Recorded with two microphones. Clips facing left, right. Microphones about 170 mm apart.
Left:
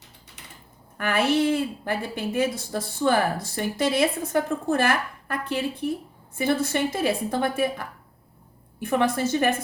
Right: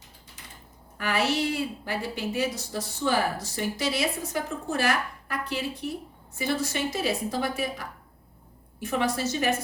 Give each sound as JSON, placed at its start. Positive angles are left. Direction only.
{"t": 0.9, "sound": "a woman's voice", "side_deg": 55}